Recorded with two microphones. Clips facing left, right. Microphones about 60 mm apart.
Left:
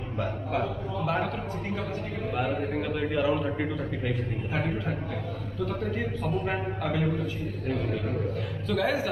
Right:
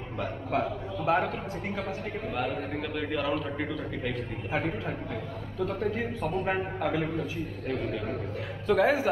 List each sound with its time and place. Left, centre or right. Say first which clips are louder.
0.2 s a sound: even; centre
2.3 s a man's voice: left 4 dB; centre
5.6 s speech: right 1 dB; centre
8.6 s a man's voice: right 4 dB; right